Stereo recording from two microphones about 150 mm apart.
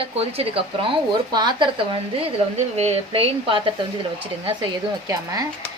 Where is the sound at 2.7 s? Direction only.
45° right (ahead or behind).